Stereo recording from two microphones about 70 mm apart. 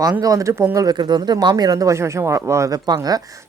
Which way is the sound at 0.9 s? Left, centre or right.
Right.